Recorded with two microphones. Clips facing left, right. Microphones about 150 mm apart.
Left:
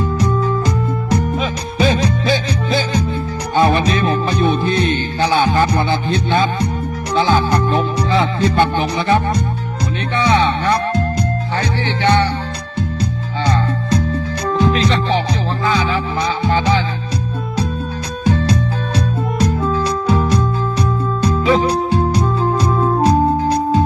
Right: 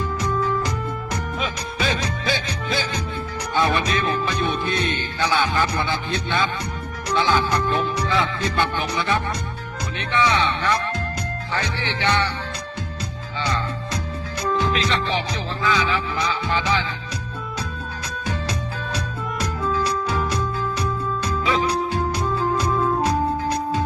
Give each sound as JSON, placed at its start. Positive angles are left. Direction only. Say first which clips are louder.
{"t": 1.8, "sound": "music", "louder": "left 9 dB", "side_deg": 30}
{"t": 13.4, "sound": "music", "louder": "left 7 dB", "side_deg": 35}
{"t": 18.9, "sound": "music", "louder": "left 11 dB", "side_deg": 30}